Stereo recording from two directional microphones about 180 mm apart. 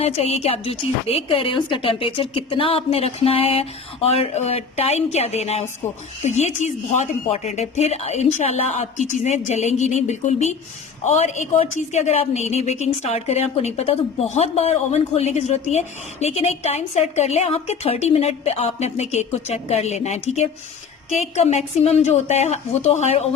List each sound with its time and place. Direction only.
0.0 s a woman's voice: 35° left (ahead or behind)